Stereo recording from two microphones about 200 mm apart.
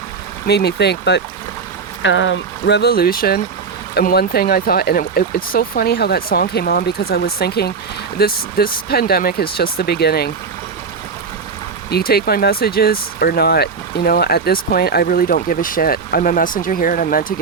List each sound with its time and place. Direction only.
0.4 s speech: 55° left (ahead or behind)
11.9 s speech: 50° left (ahead or behind)